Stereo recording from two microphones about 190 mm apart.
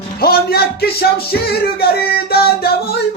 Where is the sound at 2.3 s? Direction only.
55° left (ahead or behind).